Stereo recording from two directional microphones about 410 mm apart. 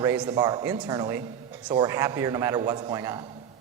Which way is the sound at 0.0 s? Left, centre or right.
Centre.